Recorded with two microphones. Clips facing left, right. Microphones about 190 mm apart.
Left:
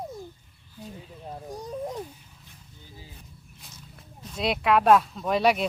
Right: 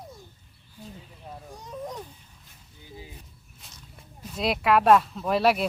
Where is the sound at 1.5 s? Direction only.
35° left (ahead or behind).